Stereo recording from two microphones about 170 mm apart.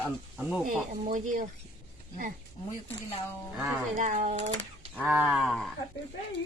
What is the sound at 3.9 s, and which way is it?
Speech, 50° right (ahead or behind).